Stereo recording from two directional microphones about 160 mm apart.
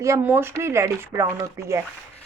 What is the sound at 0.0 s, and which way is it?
A woman's voice, 15° right (ahead or behind).